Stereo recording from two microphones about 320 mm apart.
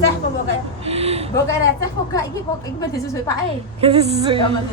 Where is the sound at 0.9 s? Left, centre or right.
Centre.